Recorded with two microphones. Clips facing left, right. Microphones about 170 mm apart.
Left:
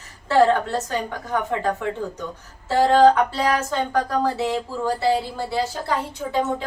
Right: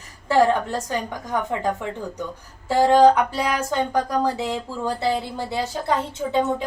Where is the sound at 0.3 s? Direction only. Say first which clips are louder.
Left 1 dB; 15° right (ahead or behind).